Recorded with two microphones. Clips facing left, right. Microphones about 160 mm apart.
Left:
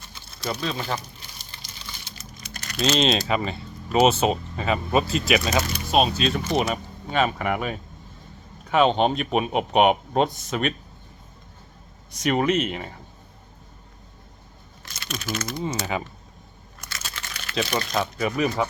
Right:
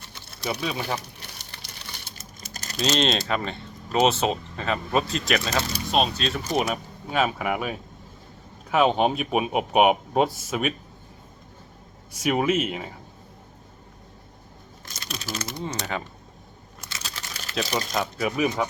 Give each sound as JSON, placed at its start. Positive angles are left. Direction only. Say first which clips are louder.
{"t": 0.6, "sound": "speech", "louder": "left 1 dB", "side_deg": -10}
{"t": 1.2, "sound": "typing", "louder": "right 2 dB", "side_deg": -65}
{"t": 2.9, "sound": "speech", "louder": "left 2 dB", "side_deg": 0}
{"t": 12.1, "sound": "speech", "louder": "left 1 dB", "side_deg": -5}
{"t": 14.9, "sound": "speech", "louder": "left 3 dB", "side_deg": -35}
{"t": 15.5, "sound": "speech", "louder": "left 3 dB", "side_deg": 5}
{"t": 16.8, "sound": "computer keyboard", "louder": "left 1 dB", "side_deg": -25}
{"t": 17.5, "sound": "speech", "louder": "left 2 dB", "side_deg": -5}